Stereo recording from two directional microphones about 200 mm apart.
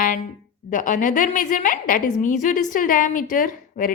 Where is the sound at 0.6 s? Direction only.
40° left (ahead or behind).